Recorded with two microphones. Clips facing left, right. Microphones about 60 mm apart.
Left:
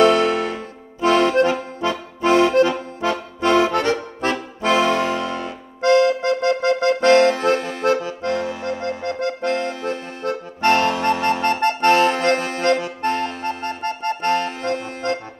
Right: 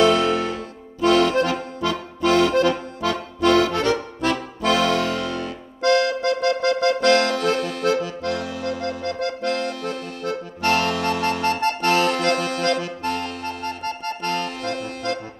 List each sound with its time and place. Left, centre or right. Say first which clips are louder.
0.1 s music: left 2 dB; left
1.0 s accordion: left 2 dB; left